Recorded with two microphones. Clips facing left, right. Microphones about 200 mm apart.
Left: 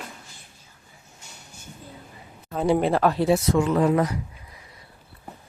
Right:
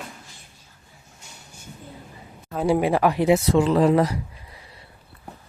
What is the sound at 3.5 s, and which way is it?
Speech, 30° right (ahead or behind).